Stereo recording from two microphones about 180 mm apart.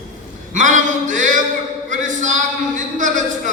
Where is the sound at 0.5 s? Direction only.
45° right (ahead or behind).